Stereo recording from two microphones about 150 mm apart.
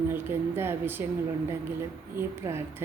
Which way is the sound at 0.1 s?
15° right (ahead or behind).